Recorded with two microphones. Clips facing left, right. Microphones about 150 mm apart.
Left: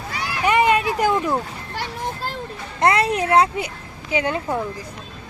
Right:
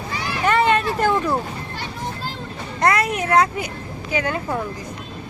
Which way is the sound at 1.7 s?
65° left (ahead or behind).